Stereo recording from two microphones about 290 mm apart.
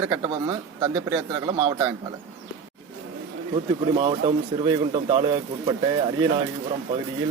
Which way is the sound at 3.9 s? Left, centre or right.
Centre.